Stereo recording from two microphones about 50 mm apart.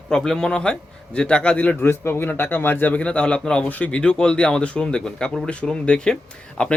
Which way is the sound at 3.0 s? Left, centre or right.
Left.